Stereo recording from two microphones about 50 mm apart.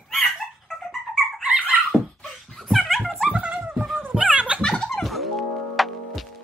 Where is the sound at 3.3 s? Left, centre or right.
Right.